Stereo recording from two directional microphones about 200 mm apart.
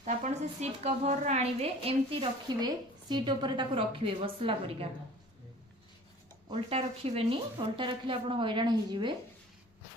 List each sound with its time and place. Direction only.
0.0 s a woman's voice: 35° right (ahead or behind)
6.5 s a woman's voice: 30° right (ahead or behind)